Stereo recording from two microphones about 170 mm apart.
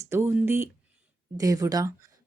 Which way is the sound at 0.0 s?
15° right (ahead or behind).